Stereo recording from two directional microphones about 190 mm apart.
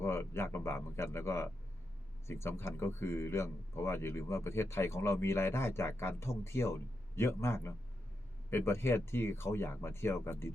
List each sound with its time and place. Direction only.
0.0 s speech: 15° left (ahead or behind)